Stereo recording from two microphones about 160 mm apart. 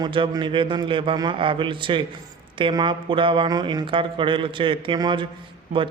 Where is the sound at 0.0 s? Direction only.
30° right (ahead or behind).